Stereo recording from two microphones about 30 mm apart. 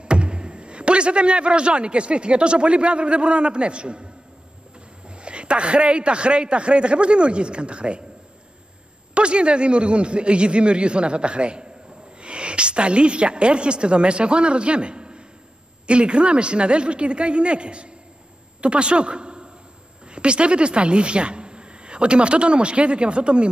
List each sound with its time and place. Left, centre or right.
0.0 s a man's voice: right
9.1 s a man's voice: right